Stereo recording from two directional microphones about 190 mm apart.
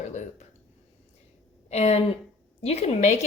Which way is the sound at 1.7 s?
35° left (ahead or behind).